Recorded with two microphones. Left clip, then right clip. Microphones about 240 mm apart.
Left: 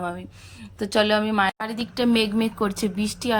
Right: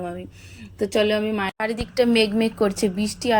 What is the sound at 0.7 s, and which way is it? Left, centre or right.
Speech, centre.